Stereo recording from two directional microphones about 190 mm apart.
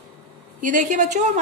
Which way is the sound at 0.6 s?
40° right (ahead or behind).